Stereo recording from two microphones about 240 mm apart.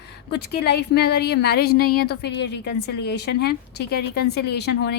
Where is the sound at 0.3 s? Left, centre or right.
Left.